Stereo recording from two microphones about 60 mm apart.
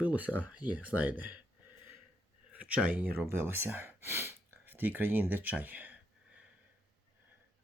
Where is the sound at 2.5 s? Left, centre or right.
Right.